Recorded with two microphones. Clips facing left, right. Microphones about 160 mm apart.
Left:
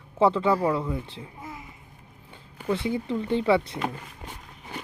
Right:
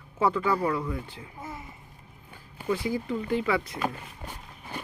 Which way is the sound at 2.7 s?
25° left (ahead or behind).